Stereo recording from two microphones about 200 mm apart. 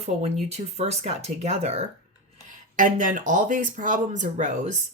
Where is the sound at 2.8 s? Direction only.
40° right (ahead or behind).